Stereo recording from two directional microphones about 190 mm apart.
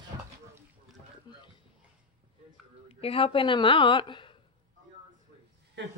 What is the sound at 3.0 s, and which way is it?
A woman's voice, 30° left (ahead or behind).